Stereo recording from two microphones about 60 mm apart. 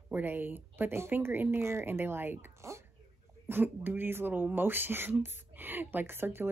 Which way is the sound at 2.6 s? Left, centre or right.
Right.